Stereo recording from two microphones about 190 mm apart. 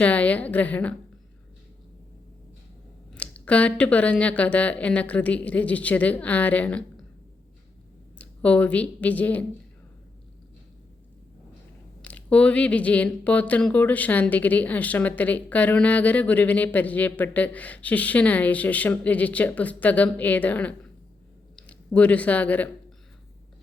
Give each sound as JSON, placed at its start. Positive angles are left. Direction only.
{"t": 0.0, "sound": "speech", "side_deg": 5}
{"t": 3.1, "sound": "speech", "side_deg": 5}
{"t": 8.2, "sound": "speech", "side_deg": 5}
{"t": 12.0, "sound": "speech", "side_deg": 5}